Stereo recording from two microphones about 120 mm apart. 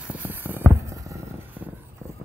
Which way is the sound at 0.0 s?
15° right (ahead or behind).